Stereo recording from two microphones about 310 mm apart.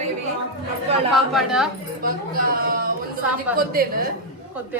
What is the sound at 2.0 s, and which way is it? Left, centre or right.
Speech, right.